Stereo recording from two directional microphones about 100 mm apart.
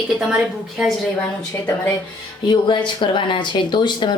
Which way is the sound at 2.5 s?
50° left (ahead or behind).